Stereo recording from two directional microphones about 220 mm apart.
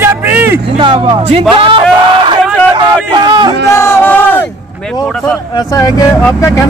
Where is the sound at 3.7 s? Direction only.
10° left (ahead or behind).